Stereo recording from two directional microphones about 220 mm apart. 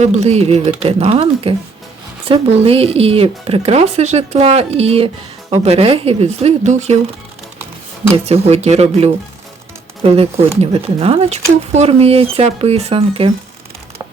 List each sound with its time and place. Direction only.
0.0 s speech: 30° right (ahead or behind)
8.1 s speech: 30° right (ahead or behind)